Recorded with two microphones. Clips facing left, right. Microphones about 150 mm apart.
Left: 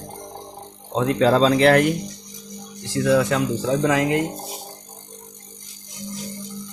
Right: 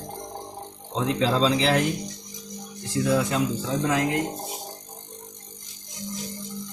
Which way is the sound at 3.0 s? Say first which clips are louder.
Left 5 dB; 90° left.